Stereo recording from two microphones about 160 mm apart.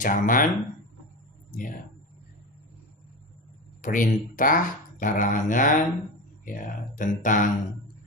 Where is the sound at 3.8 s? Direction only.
55° left (ahead or behind).